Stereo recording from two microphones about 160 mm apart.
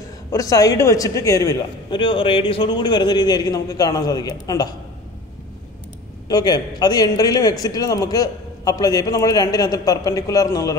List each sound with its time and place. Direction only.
0.3 s a man's voice: 20° left (ahead or behind)
6.2 s a man's voice: 25° left (ahead or behind)